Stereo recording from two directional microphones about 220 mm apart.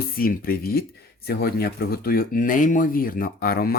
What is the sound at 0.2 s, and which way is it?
Speech, 40° left (ahead or behind).